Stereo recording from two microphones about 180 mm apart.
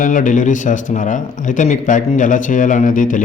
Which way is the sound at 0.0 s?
45° left (ahead or behind).